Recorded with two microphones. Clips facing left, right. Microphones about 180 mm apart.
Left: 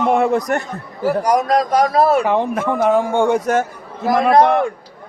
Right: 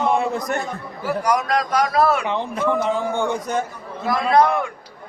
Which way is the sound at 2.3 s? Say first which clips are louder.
Left 3 dB; 75° left (ahead or behind).